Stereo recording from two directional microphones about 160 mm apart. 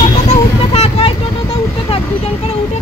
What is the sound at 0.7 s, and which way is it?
Speech, 35° left (ahead or behind).